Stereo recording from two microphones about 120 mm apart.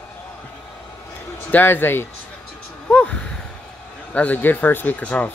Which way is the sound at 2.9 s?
10° left (ahead or behind).